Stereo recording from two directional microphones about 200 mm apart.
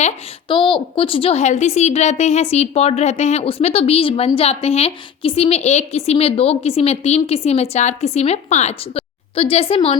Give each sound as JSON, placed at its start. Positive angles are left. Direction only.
{"t": 0.0, "sound": "a woman's voice", "side_deg": 25}